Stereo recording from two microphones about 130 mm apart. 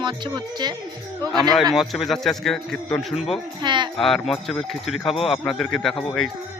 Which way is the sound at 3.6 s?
35° right (ahead or behind).